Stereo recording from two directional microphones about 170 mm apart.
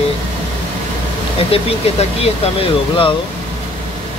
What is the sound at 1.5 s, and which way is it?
Speech, 35° left (ahead or behind).